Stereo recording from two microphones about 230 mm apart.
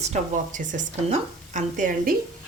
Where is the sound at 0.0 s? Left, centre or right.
Right.